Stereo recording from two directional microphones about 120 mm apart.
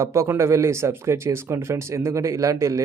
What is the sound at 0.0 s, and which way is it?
Speech, 25° right (ahead or behind).